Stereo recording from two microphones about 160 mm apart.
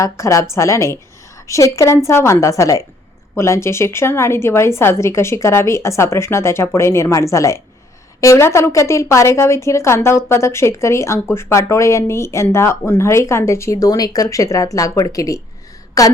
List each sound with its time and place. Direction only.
0.0 s a woman's voice: 20° left (ahead or behind)